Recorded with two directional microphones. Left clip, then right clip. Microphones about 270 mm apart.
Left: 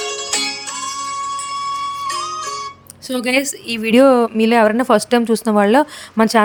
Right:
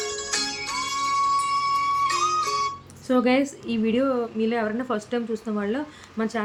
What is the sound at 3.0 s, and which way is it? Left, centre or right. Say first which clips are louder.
Speech: left 3 dB; left.